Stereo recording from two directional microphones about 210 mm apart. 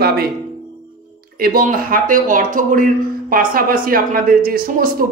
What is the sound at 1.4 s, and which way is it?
Speech, 45° right (ahead or behind).